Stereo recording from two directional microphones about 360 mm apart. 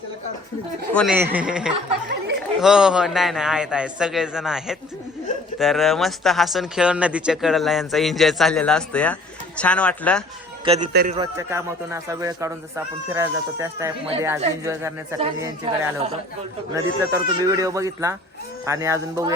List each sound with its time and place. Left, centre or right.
0.9 s speech: centre
2.0 s chatter: right
2.6 s speech: centre
10.7 s a man's voice: right
11.2 s speech: centre